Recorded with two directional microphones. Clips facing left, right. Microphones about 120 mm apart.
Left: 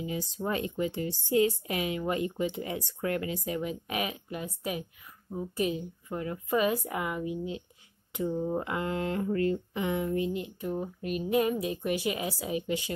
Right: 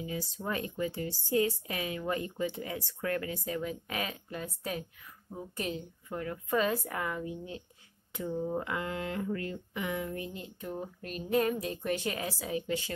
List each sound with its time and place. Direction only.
0.0 s speech: 20° left (ahead or behind)